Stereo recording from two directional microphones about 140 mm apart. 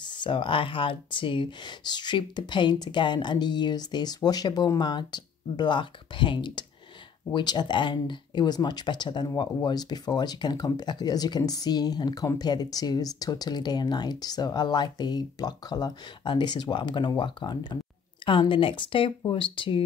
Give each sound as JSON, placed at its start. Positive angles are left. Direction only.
{"t": 0.0, "sound": "speech", "side_deg": 35}